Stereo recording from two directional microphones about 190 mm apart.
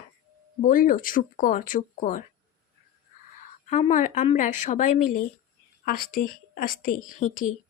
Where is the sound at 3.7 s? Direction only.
40° left (ahead or behind).